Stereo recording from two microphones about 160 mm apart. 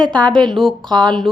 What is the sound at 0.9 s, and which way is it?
Speech, 25° right (ahead or behind).